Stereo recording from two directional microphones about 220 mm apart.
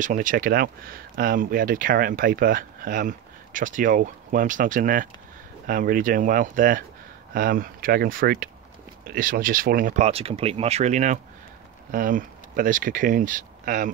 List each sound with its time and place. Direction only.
0.0 s speech: 35° right (ahead or behind)